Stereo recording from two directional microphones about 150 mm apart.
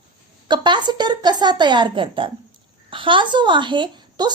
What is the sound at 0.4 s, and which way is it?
A woman's voice, 30° right (ahead or behind).